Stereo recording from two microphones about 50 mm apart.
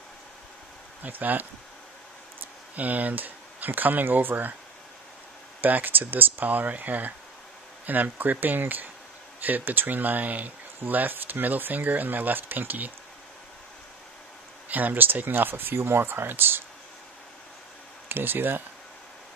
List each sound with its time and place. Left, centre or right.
1.0 s speech: right
2.7 s speech: right
5.6 s speech: right
14.7 s speech: right
18.0 s speech: right